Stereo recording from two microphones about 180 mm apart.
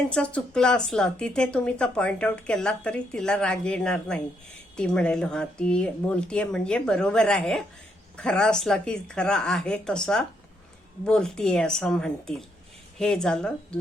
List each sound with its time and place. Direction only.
0.1 s speech: 5° left (ahead or behind)